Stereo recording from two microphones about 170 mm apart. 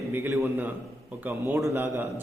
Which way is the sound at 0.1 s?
15° right (ahead or behind).